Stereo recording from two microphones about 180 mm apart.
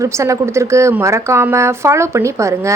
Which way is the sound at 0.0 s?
15° right (ahead or behind).